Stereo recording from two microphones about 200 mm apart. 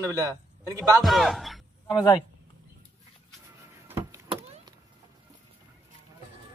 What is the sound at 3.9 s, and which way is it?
Vehicle, 15° right (ahead or behind).